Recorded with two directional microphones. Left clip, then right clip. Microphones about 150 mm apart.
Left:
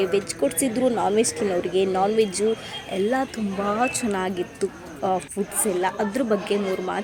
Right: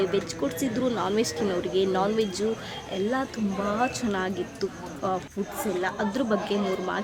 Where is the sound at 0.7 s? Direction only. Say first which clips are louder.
Left 5 dB; 10° left (ahead or behind).